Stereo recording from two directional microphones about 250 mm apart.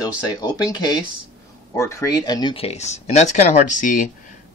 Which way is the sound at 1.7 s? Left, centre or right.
Centre.